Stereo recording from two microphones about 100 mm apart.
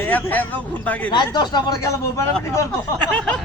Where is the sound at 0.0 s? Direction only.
15° left (ahead or behind).